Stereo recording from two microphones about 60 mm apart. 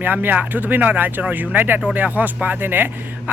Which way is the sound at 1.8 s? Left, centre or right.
Right.